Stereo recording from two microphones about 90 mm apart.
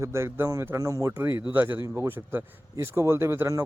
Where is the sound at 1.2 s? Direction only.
25° right (ahead or behind).